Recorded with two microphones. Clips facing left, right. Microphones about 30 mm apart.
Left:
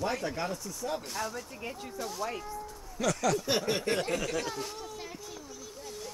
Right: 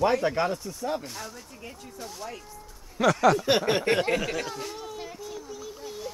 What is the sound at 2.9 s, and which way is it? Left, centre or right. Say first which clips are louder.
Speech: right 8 dB; right.